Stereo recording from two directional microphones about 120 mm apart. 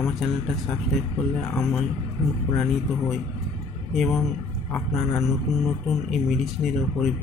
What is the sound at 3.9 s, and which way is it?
Speech, centre (ahead or behind).